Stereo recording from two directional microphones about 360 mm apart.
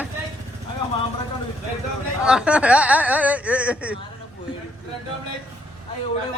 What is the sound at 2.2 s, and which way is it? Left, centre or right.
Speech, centre.